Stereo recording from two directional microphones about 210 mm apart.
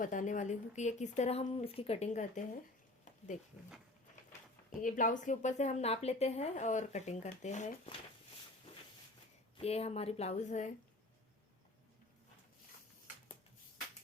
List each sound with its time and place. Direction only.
0.0 s a woman's voice: 40° left (ahead or behind)
4.8 s a woman's voice: 40° left (ahead or behind)
9.6 s speech: 30° left (ahead or behind)